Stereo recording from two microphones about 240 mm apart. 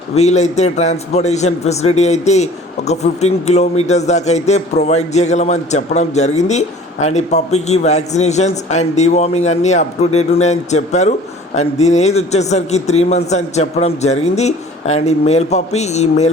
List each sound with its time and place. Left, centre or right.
0.1 s a man's voice: left